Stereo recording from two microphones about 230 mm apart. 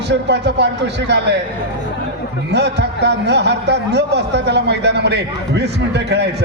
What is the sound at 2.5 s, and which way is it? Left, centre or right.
A man's voice, right.